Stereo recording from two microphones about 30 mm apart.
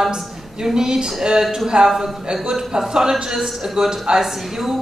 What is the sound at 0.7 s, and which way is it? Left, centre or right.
A man's voice, right.